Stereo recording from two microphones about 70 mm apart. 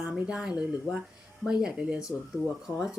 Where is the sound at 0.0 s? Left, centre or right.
Centre.